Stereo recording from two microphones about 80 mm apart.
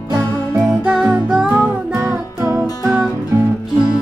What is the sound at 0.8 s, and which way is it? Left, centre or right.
Music, centre.